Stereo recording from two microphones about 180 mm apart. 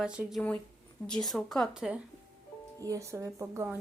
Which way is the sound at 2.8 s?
15° right (ahead or behind).